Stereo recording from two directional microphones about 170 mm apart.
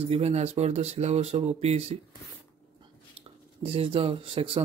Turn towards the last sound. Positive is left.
turn(degrees=-35)  # may be behind; listen again after turning